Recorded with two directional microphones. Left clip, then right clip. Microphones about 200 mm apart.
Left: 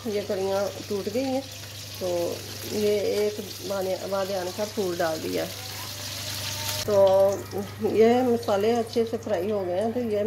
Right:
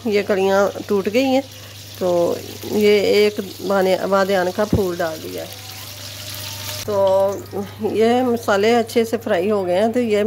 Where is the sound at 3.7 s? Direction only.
50° right (ahead or behind).